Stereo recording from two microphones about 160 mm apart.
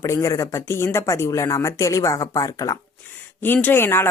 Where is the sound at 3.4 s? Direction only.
10° left (ahead or behind).